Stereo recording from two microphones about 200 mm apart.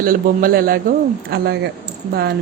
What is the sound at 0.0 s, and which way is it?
A man's voice, 45° right (ahead or behind).